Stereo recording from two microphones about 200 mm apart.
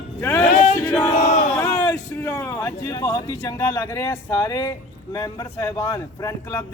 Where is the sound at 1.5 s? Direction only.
15° left (ahead or behind).